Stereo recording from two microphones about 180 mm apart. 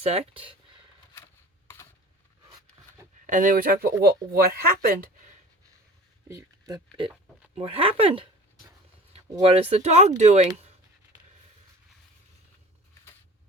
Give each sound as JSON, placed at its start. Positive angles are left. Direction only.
{"t": 0.0, "sound": "speech", "side_deg": -35}
{"t": 3.2, "sound": "speech", "side_deg": -45}
{"t": 6.2, "sound": "a sound", "side_deg": -20}
{"t": 7.6, "sound": "speech", "side_deg": -30}
{"t": 9.4, "sound": "speech", "side_deg": -30}